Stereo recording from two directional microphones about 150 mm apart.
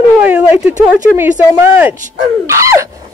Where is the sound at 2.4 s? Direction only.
20° right (ahead or behind).